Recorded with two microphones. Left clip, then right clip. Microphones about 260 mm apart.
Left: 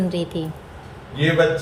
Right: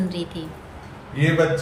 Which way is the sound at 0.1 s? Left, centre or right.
Centre.